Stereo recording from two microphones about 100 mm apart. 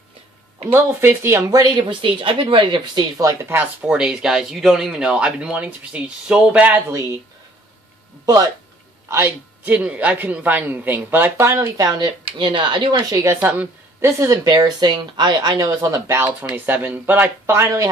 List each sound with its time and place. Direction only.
0.7 s speech: 25° right (ahead or behind)
1.6 s speech: 50° right (ahead or behind); by 3.5 s 35° right (ahead or behind)
3.8 s speech: 10° right (ahead or behind)
6.9 s speech: 30° right (ahead or behind)
9.1 s speech: 20° right (ahead or behind); by 12.1 s 40° right (ahead or behind)
12.4 s speech: 50° right (ahead or behind)
13.4 s speech: 15° right (ahead or behind)
14.0 s speech: 30° right (ahead or behind)
16.5 s speech: 20° right (ahead or behind)